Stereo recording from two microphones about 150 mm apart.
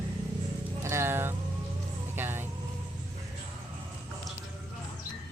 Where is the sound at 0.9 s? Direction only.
15° right (ahead or behind).